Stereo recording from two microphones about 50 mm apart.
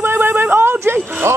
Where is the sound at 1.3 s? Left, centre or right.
Right.